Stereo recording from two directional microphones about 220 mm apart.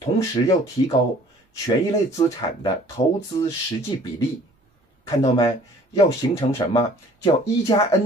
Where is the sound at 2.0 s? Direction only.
15° left (ahead or behind).